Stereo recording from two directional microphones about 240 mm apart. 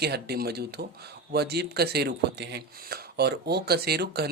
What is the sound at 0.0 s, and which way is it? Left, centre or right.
Speech, right.